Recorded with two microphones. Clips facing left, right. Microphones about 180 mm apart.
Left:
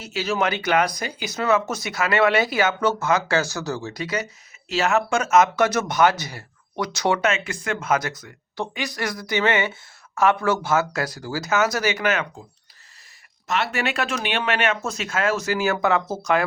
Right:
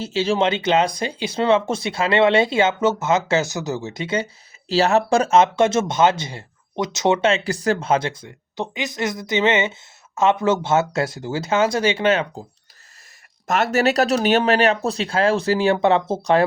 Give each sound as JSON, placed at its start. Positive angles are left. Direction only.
{"t": 0.0, "sound": "speech", "side_deg": -30}
{"t": 13.5, "sound": "speech", "side_deg": -45}